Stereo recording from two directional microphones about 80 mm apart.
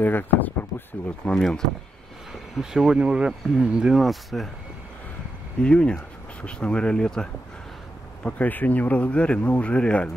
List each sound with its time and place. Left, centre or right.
0.0 s speech: left
1.3 s speech: centre
2.5 s speech: centre
5.6 s speech: centre